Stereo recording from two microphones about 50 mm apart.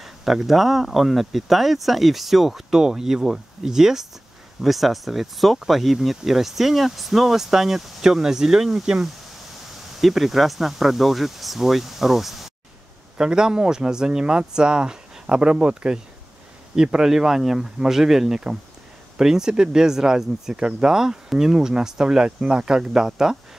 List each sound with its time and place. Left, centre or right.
0.0 s speech: centre
13.2 s speech: centre